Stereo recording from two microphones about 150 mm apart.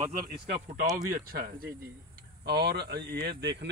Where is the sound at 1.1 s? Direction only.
85° right.